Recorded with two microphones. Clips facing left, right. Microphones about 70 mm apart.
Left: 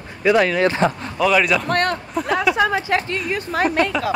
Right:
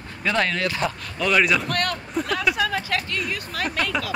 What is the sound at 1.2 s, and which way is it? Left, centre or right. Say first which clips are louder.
Speech: left 3 dB; centre.